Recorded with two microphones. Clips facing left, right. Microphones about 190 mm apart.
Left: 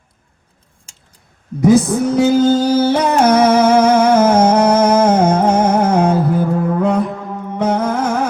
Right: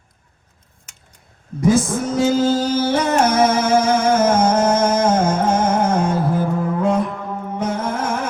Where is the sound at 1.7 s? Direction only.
65° left (ahead or behind).